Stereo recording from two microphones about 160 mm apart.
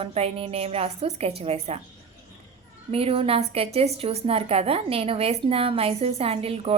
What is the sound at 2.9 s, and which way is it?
A woman's voice, 35° right (ahead or behind).